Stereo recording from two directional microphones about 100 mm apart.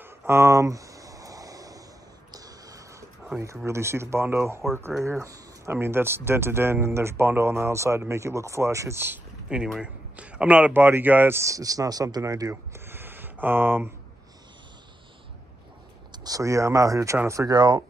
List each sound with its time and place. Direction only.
0.0 s a sound: 25° right (ahead or behind)
3.6 s speech: 25° right (ahead or behind)
5.7 s speech: 25° right (ahead or behind)
9.5 s speech: 10° right (ahead or behind); by 12.8 s 35° right (ahead or behind)
12.8 s a sound: 20° right (ahead or behind)
16.1 s speech: 35° right (ahead or behind)
17.6 s speech: 45° right (ahead or behind)